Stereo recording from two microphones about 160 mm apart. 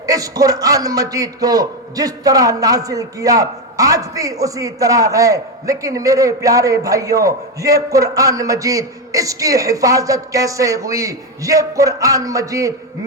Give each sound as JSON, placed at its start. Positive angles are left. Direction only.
{"t": 0.0, "sound": "a man's voice", "side_deg": -20}